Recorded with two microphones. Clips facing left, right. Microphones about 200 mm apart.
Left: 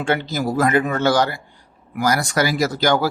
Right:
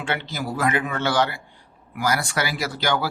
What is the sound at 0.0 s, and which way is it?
Speech, 45° left (ahead or behind).